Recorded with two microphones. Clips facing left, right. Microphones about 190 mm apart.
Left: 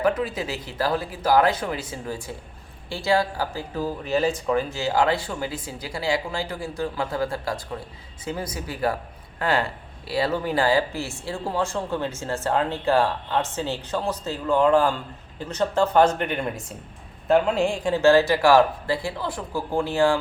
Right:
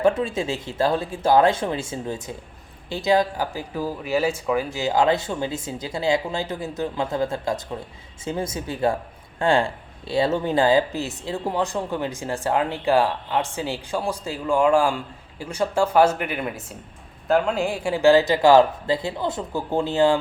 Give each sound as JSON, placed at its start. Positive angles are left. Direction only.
{"t": 0.0, "sound": "speech", "side_deg": -25}